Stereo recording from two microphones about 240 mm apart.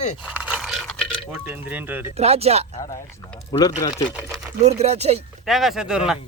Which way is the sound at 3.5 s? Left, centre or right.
Centre.